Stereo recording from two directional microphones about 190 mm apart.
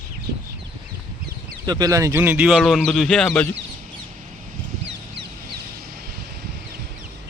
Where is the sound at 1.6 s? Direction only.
20° right (ahead or behind); by 3.5 s 5° left (ahead or behind).